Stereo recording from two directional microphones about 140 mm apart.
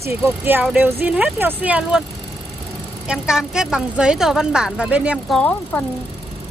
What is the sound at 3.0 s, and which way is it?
A woman's voice, 5° right (ahead or behind).